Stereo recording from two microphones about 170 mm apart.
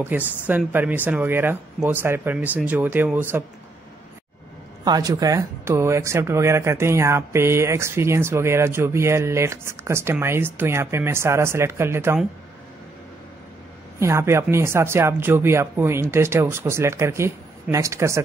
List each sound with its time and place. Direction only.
0.0 s speech: 10° right (ahead or behind)
4.8 s speech: 20° right (ahead or behind)
13.9 s speech: 15° right (ahead or behind)